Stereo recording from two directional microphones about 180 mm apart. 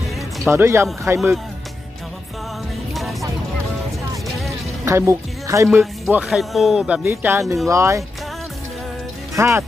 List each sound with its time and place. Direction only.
0.5 s speech: 15° right (ahead or behind)
2.9 s music: centre (ahead or behind)
4.8 s speech: 15° right (ahead or behind)
5.7 s speech: centre (ahead or behind)
9.3 s speech: 15° right (ahead or behind)